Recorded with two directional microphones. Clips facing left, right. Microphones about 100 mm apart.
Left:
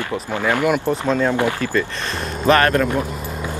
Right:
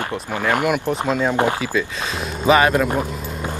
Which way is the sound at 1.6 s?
10° right (ahead or behind).